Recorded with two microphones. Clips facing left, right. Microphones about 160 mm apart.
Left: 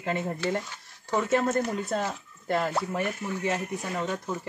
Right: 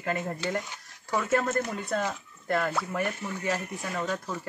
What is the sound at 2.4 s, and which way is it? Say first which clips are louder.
Speech: left 1 dB; 25° left (ahead or behind).